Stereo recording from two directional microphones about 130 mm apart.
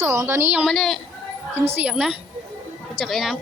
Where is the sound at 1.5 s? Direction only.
20° right (ahead or behind); by 3.4 s centre (ahead or behind).